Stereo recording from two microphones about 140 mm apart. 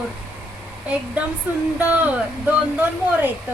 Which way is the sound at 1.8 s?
10° right (ahead or behind).